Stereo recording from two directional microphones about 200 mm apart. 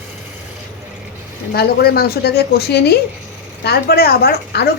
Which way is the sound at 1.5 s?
50° left (ahead or behind).